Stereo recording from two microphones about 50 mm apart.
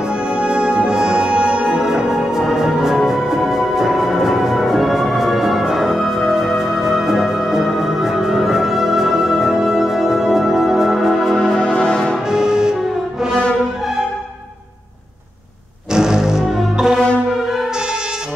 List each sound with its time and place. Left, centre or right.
0.3 s music: centre
11.3 s music: centre
12.3 s music: centre
15.9 s music: centre